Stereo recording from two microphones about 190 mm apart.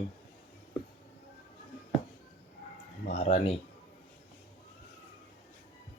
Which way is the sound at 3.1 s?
35° left (ahead or behind).